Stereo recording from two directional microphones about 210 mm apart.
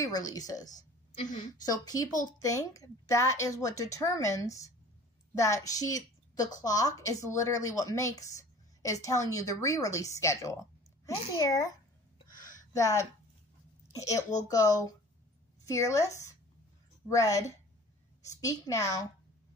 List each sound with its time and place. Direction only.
0.0 s a woman's voice: 15° left (ahead or behind)
12.3 s a sound: 40° left (ahead or behind)
12.7 s a woman's voice: 15° left (ahead or behind)
17.1 s a woman's voice: 15° left (ahead or behind)